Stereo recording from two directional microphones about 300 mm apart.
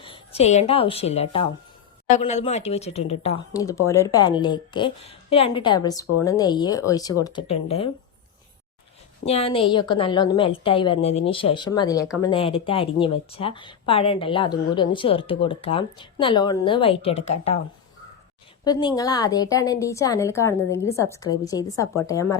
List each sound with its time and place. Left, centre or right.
0.0 s a woman's voice: centre
9.2 s a woman's voice: centre
18.6 s a woman's voice: centre